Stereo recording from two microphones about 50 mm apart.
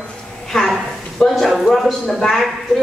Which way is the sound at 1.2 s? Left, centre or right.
Centre.